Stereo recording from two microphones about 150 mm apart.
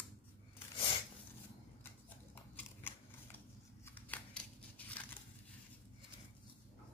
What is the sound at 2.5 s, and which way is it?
Scissors, 10° left (ahead or behind).